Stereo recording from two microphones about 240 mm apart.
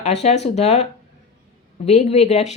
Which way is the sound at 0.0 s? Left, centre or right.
Left.